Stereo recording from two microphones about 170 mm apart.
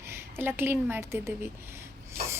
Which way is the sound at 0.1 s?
15° right (ahead or behind).